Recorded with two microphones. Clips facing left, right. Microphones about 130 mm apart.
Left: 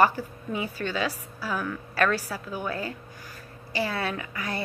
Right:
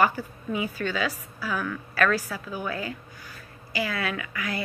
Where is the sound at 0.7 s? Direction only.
35° left (ahead or behind).